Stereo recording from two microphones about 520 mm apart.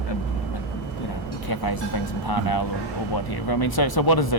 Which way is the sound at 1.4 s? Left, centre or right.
Left.